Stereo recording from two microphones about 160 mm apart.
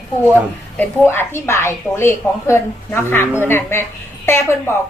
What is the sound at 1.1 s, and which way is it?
A woman's voice, 15° left (ahead or behind).